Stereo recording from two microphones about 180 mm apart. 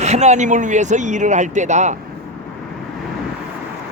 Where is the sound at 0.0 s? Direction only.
40° right (ahead or behind).